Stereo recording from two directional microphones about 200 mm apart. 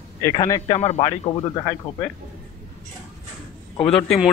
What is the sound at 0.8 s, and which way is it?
Speech, 30° left (ahead or behind).